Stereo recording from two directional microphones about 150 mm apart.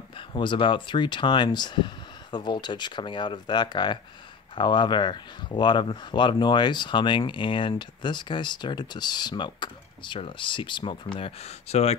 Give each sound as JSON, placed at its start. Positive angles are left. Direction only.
{"t": 0.3, "sound": "speech", "side_deg": 35}